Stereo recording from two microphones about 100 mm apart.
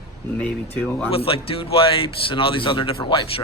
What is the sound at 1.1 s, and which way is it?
Speech, 75° left (ahead or behind).